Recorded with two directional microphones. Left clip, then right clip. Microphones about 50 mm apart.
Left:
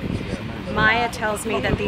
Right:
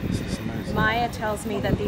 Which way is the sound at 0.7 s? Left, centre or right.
Left.